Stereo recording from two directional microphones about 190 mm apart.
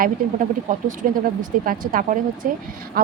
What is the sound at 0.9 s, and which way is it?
Speech, 45° right (ahead or behind).